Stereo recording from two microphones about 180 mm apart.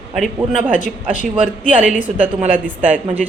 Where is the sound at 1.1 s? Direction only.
45° left (ahead or behind).